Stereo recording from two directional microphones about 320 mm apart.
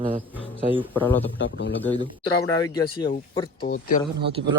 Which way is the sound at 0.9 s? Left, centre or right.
Centre.